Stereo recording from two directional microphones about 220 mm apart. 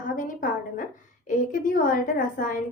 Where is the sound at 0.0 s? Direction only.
35° left (ahead or behind).